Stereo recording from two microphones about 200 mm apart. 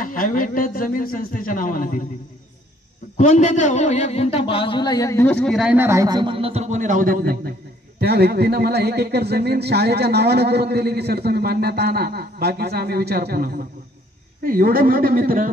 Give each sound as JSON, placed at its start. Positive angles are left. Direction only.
{"t": 0.0, "sound": "a man's voice", "side_deg": 45}
{"t": 3.2, "sound": "a man's voice", "side_deg": 40}